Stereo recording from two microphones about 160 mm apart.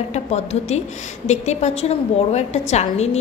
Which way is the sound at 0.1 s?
45° left (ahead or behind).